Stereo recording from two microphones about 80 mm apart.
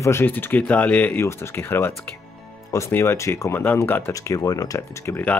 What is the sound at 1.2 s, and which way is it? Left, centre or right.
Speech, left.